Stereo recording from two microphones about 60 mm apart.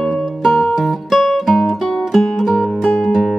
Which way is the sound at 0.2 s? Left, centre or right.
Centre.